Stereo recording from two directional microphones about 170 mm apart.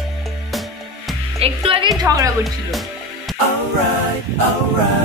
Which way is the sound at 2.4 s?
Centre (ahead or behind).